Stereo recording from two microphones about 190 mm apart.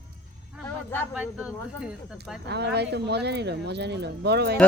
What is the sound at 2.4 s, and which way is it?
Speech, 65° right (ahead or behind).